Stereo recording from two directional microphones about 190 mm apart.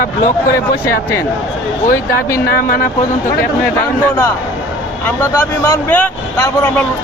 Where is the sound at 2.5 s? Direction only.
50° left (ahead or behind).